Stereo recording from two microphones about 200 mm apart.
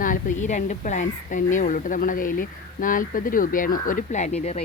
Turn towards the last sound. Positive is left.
turn(degrees=35)  # may be behind; listen again after turning